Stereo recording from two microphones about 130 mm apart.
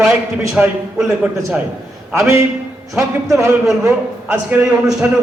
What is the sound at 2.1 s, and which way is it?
Speech, 20° right (ahead or behind).